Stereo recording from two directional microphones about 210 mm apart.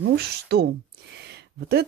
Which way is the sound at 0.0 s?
50° right (ahead or behind).